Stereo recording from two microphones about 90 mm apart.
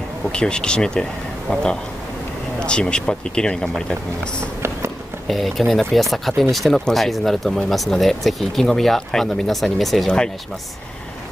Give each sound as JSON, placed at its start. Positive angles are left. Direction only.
{"t": 0.3, "sound": "speech", "side_deg": 10}
{"t": 4.6, "sound": "a sound", "side_deg": -30}
{"t": 5.3, "sound": "speech", "side_deg": 0}